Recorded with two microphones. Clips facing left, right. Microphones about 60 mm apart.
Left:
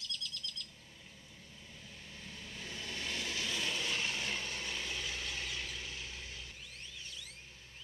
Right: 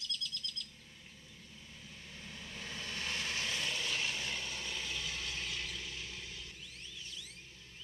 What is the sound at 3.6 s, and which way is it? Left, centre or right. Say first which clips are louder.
Vehicle: left 1 dB; left.